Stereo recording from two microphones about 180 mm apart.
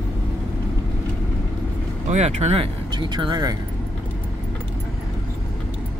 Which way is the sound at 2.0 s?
40° right (ahead or behind).